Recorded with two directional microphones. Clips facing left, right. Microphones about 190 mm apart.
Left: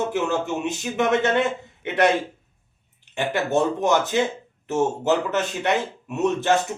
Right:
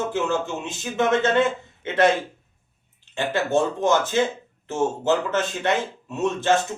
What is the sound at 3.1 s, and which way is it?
Speech, 15° left (ahead or behind).